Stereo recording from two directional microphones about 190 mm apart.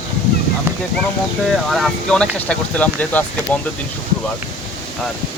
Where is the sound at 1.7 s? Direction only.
Centre (ahead or behind).